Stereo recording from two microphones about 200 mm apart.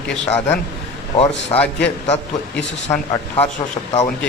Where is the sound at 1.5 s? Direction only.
20° left (ahead or behind).